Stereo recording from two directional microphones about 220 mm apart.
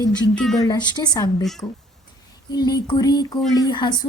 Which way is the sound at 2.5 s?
15° left (ahead or behind).